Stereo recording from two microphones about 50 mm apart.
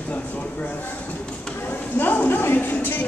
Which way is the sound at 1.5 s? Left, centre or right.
Left.